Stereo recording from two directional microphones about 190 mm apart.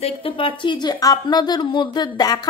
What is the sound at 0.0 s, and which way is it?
A woman's voice, 30° left (ahead or behind).